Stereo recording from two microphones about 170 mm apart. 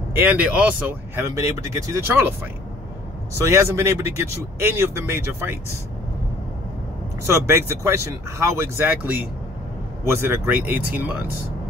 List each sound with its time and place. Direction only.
0.1 s speech: 10° right (ahead or behind)
7.2 s speech: 15° right (ahead or behind)